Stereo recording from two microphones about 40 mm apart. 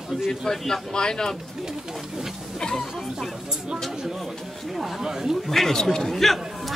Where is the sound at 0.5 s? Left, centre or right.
Centre.